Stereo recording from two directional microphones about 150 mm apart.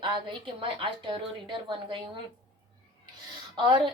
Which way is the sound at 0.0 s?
30° right (ahead or behind).